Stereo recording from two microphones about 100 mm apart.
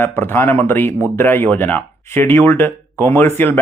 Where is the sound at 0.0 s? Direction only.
20° left (ahead or behind).